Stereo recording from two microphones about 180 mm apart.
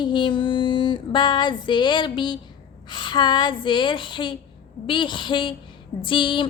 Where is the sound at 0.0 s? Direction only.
25° left (ahead or behind).